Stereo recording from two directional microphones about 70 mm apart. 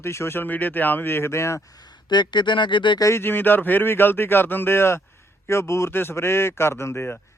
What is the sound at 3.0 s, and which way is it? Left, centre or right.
A man's voice, left.